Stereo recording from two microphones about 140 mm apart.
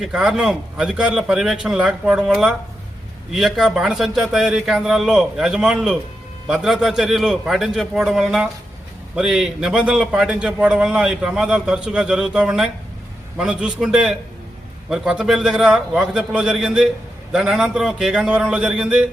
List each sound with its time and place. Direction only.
0.0 s a man's voice: 5° right (ahead or behind)